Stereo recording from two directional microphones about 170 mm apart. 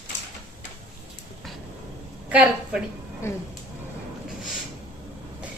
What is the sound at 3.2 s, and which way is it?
Speech, 15° left (ahead or behind).